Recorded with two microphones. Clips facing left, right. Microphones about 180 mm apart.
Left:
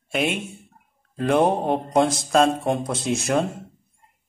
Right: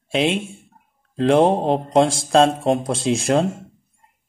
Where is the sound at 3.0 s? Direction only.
90° right.